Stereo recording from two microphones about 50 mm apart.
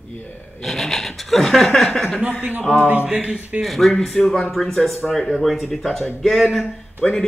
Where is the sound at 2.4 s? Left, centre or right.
Right.